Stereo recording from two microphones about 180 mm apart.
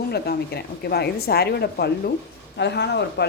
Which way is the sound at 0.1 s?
65° left (ahead or behind).